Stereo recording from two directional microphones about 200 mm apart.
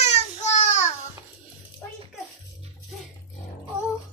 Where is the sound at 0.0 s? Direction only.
35° left (ahead or behind).